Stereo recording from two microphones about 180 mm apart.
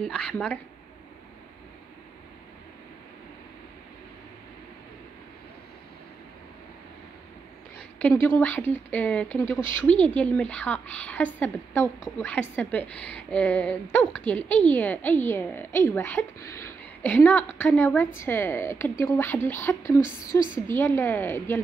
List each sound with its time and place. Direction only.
0.0 s a woman's voice: 5° left (ahead or behind)
8.0 s a woman's voice: 15° left (ahead or behind)
20.2 s a woman's voice: 50° left (ahead or behind)
20.7 s a woman's voice: 10° left (ahead or behind)